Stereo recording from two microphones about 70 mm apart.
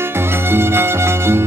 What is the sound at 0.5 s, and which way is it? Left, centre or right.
Music, right.